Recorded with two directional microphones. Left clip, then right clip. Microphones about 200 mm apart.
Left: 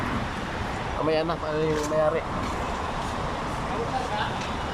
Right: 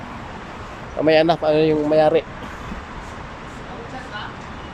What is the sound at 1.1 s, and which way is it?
Speech, 55° right (ahead or behind).